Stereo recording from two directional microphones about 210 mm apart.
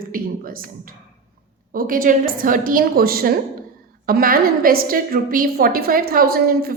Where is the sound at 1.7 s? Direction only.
40° right (ahead or behind).